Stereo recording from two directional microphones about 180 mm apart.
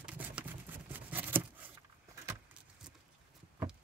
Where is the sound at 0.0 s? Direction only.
10° right (ahead or behind).